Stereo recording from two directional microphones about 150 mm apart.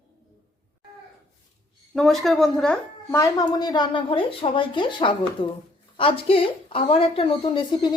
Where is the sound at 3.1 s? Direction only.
25° left (ahead or behind).